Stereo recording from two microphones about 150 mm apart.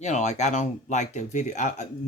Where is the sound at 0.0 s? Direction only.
50° left (ahead or behind).